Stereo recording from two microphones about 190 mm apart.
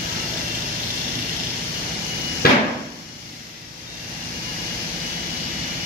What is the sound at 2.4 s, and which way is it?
Hammer, 55° left (ahead or behind).